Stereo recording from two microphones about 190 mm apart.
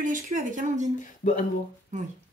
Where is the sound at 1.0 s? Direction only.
40° left (ahead or behind).